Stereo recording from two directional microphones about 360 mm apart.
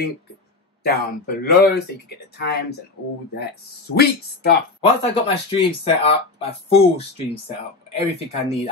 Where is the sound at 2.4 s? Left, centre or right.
Left.